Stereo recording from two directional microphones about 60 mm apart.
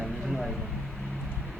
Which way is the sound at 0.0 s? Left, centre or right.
Centre.